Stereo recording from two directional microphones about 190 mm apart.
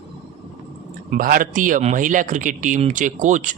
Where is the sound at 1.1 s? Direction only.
45° right (ahead or behind).